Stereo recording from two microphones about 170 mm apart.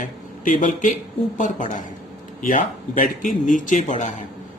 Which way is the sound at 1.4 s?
50° left (ahead or behind).